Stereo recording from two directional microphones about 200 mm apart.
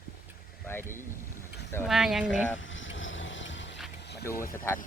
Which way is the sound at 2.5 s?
70° left (ahead or behind).